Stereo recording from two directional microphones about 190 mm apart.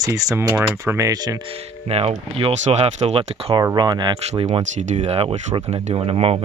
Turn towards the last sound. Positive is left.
turn(degrees=-30)  # may be behind; listen again after turning